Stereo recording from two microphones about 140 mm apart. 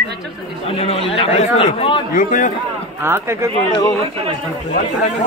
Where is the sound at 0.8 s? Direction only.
40° left (ahead or behind).